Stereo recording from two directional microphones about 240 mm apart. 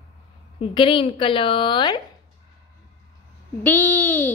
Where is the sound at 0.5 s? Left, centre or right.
Left.